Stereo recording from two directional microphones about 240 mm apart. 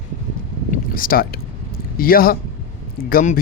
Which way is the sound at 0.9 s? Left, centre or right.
Left.